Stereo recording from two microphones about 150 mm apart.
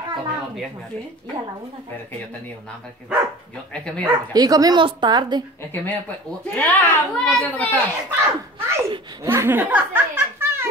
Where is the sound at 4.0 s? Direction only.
25° right (ahead or behind).